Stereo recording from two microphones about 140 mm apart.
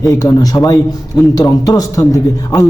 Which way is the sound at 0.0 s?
25° left (ahead or behind).